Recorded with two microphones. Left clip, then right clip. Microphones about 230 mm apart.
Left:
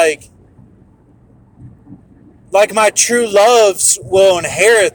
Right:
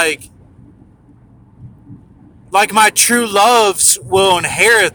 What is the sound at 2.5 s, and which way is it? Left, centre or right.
Speech, centre.